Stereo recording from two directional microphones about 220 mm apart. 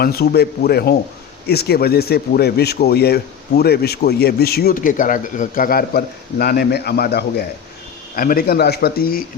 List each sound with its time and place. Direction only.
0.0 s a man's voice: 45° left (ahead or behind)